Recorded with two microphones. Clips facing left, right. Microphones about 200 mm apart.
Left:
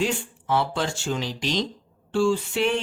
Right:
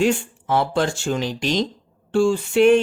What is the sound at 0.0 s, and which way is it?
Speech, 50° right (ahead or behind).